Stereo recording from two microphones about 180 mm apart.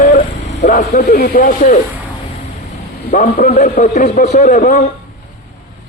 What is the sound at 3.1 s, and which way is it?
Speech, 55° left (ahead or behind).